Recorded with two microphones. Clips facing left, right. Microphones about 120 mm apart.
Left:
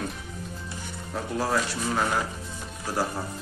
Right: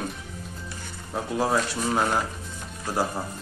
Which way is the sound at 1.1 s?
15° right (ahead or behind).